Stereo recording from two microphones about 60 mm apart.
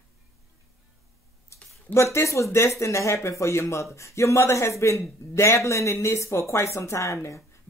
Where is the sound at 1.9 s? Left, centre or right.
Left.